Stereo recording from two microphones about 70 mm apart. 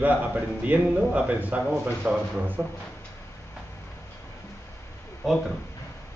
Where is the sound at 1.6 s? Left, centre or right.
Centre.